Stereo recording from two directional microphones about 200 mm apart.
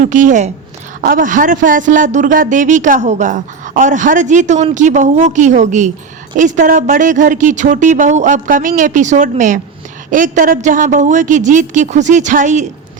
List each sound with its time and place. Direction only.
0.0 s speech: 40° right (ahead or behind)